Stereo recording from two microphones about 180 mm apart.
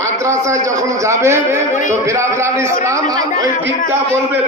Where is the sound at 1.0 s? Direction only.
15° right (ahead or behind).